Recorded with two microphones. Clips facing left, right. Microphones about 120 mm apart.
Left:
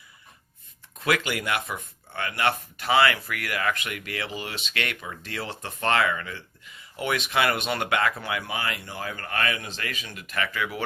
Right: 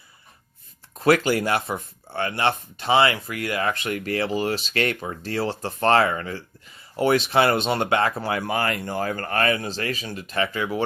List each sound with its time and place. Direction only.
0.9 s speech: 35° right (ahead or behind)